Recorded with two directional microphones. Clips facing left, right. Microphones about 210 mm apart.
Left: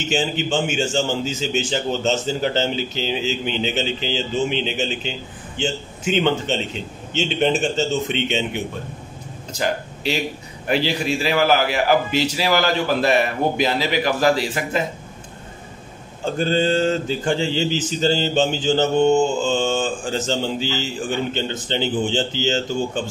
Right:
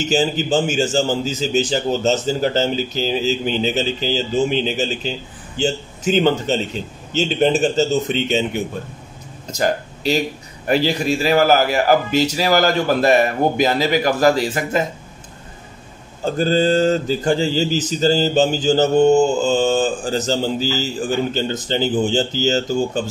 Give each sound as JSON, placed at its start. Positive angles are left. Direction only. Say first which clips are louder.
{"t": 0.0, "sound": "speech", "louder": "right 4 dB", "side_deg": -40}
{"t": 9.5, "sound": "a man's voice", "louder": "right 4 dB", "side_deg": -40}
{"t": 16.3, "sound": "speech", "louder": "right 3 dB", "side_deg": -40}